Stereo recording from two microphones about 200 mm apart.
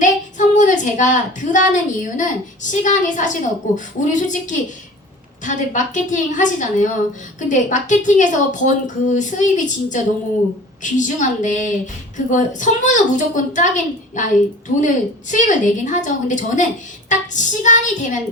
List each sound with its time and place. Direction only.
0.0 s a woman's voice: 40° left (ahead or behind)